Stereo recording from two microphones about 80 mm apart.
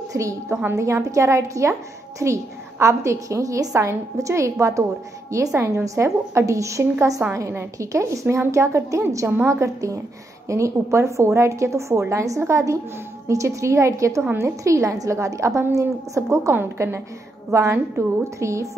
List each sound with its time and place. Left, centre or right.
0.1 s a woman's voice: right